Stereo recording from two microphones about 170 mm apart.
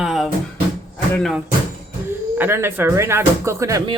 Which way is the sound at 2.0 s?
15° right (ahead or behind).